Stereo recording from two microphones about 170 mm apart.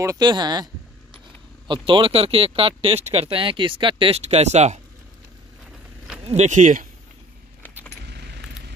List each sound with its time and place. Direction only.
0.0 s speech: 20° right (ahead or behind)
1.7 s speech: 30° right (ahead or behind)
6.2 s speech: 40° right (ahead or behind)